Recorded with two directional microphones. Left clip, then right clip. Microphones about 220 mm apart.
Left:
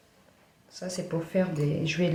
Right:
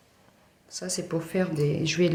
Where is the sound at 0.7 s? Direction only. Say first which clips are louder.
Right 2 dB; 40° right (ahead or behind).